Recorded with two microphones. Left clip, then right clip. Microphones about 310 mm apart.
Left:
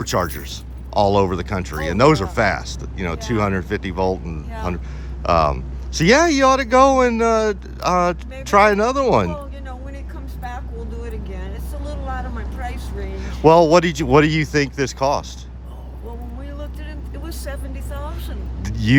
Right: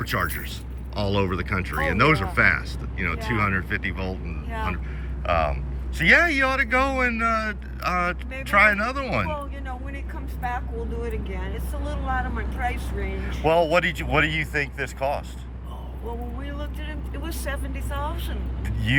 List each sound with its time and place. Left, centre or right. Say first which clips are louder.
0.0 s speech: left 5 dB; centre
11.0 s speech: right 1 dB; centre
13.1 s speech: left 8 dB; centre
17.2 s speech: even; centre
18.6 s vehicle: left 6 dB; centre